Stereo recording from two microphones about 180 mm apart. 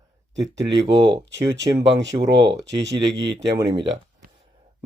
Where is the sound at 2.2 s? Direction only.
20° right (ahead or behind).